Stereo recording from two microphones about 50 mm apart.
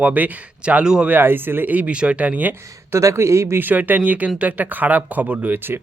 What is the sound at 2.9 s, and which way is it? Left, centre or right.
Speech, right.